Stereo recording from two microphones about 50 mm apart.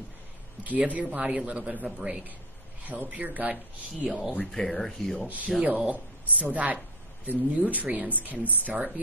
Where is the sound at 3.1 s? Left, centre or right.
Right.